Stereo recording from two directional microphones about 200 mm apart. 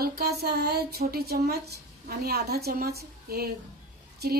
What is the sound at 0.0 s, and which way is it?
Speech, 50° right (ahead or behind).